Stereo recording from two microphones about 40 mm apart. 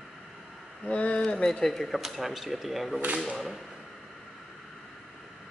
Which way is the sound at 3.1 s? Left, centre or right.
Centre.